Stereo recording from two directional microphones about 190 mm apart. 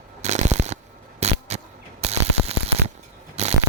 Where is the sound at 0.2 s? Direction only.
35° right (ahead or behind).